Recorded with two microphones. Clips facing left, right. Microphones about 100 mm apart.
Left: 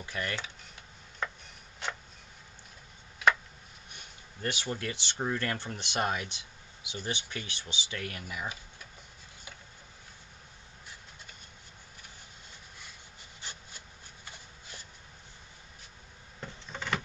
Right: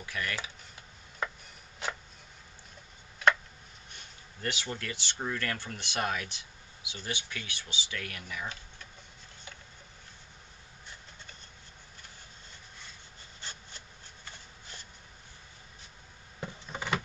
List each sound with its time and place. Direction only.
0.0 s speech: 30° left (ahead or behind)
1.2 s chopping: 5° right (ahead or behind)
1.8 s a sound: 5° right (ahead or behind)
4.4 s speech: 15° left (ahead or behind)
13.4 s wood: 15° left (ahead or behind)
16.4 s a sound: 10° right (ahead or behind)